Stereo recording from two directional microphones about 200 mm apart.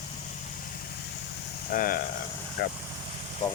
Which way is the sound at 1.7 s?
45° left (ahead or behind).